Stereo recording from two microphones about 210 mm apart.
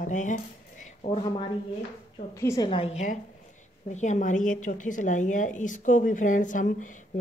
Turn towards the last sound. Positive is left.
turn(degrees=40)  # may be behind; listen again after turning